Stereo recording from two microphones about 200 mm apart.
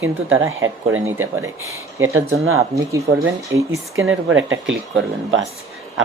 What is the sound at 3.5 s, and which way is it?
Speech, 15° right (ahead or behind).